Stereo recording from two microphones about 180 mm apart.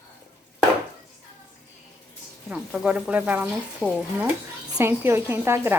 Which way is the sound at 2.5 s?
5° right (ahead or behind).